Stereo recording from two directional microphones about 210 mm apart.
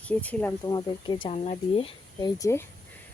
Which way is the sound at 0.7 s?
20° left (ahead or behind).